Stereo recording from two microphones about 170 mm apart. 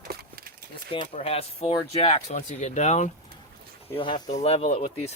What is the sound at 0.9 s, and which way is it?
Speech, 35° left (ahead or behind).